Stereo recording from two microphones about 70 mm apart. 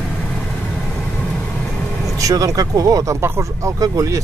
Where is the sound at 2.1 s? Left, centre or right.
Right.